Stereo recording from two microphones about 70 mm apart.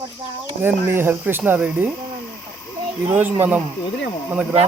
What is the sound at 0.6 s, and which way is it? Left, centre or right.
Speech, right.